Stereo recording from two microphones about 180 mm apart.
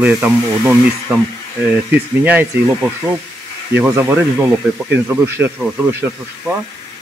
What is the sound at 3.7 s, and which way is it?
Speech, 10° right (ahead or behind).